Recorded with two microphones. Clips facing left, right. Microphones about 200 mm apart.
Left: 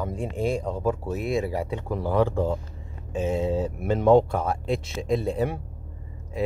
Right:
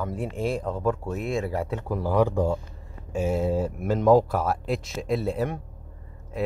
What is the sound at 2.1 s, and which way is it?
Speech, 15° right (ahead or behind).